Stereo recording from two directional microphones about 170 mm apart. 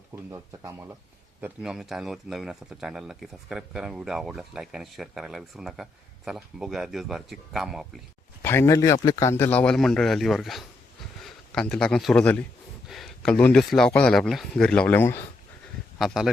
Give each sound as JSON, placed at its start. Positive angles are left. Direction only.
{"t": 0.1, "sound": "speech", "side_deg": -15}
{"t": 8.4, "sound": "a man's voice", "side_deg": 15}
{"t": 16.0, "sound": "speech", "side_deg": 0}